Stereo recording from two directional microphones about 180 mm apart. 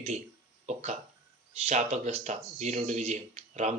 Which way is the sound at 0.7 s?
40° right (ahead or behind).